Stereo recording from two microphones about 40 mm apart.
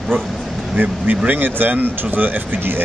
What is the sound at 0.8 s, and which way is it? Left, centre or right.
Speech, right.